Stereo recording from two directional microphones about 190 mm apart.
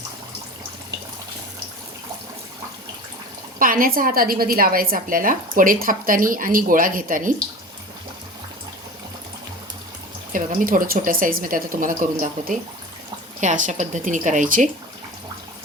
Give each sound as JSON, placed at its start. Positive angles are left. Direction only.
{"t": 3.6, "sound": "a woman's voice", "side_deg": -45}
{"t": 10.3, "sound": "a woman's voice", "side_deg": -45}